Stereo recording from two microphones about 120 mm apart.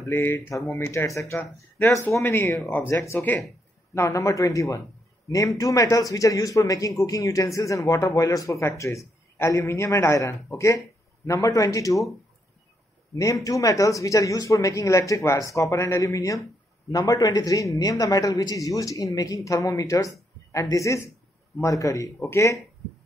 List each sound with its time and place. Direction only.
0.0 s a man's voice: 20° left (ahead or behind)
13.1 s a man's voice: 25° left (ahead or behind)